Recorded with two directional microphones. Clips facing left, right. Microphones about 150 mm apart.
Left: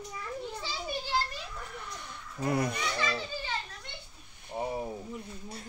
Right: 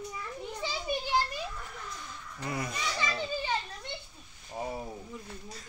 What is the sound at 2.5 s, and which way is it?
Speech, 55° left (ahead or behind).